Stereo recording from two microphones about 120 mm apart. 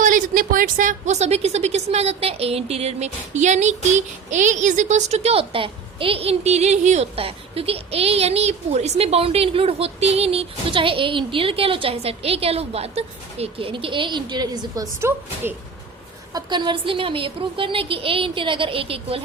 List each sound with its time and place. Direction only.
0.8 s a woman's voice: 85° right; by 14.8 s 35° right (ahead or behind)
16.3 s speech: 40° right (ahead or behind)